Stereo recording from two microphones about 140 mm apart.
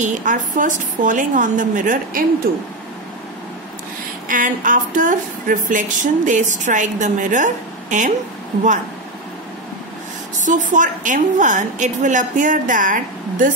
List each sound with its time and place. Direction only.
0.0 s a woman's voice: 65° right (ahead or behind)
2.5 s speech: 90° right
4.3 s a woman's voice: 70° right (ahead or behind)
10.4 s a woman's voice: 65° right (ahead or behind)